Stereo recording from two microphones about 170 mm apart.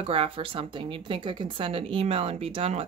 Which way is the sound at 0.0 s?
35° right (ahead or behind).